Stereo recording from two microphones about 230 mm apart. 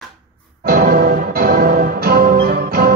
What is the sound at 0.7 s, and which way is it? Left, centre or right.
Music, right.